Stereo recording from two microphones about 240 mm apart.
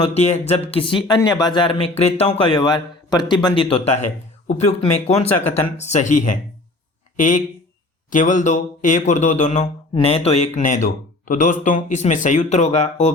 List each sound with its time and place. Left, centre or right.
0.0 s speech: left